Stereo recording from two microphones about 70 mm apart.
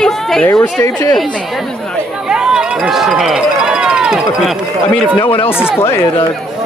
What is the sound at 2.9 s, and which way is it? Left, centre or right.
Speech, centre.